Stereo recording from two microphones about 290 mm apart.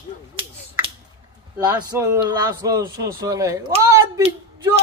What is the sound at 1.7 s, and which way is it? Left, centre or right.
Speech, centre.